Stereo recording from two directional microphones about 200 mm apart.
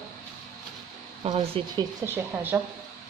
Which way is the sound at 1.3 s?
20° right (ahead or behind).